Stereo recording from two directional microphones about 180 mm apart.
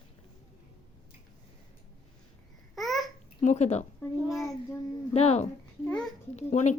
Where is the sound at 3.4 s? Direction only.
40° left (ahead or behind).